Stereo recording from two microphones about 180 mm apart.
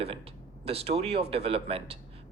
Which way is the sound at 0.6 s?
35° right (ahead or behind).